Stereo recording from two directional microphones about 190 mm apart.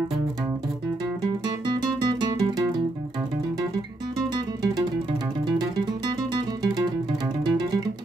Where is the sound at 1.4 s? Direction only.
20° right (ahead or behind).